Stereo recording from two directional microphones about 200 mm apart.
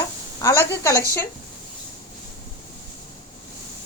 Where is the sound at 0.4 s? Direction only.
15° left (ahead or behind).